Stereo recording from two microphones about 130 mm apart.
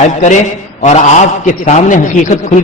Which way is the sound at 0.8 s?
65° left (ahead or behind).